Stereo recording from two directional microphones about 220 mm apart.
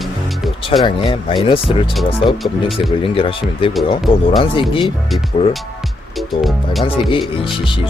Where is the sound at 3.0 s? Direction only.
25° left (ahead or behind).